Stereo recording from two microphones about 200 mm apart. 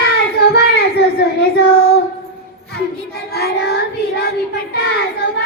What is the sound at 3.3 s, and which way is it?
Child singing, 55° left (ahead or behind).